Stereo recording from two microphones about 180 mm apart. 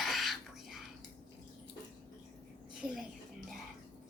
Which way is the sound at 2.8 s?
20° left (ahead or behind).